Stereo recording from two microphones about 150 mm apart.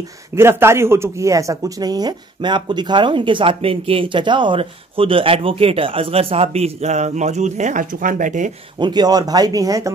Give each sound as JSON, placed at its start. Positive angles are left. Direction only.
{"t": 0.4, "sound": "speech", "side_deg": -15}
{"t": 8.7, "sound": "speech", "side_deg": -30}